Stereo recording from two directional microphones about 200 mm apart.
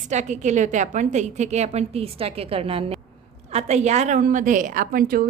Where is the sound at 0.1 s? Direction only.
35° right (ahead or behind).